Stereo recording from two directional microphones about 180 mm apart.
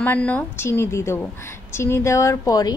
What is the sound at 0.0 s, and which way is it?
A woman's voice, 10° left (ahead or behind).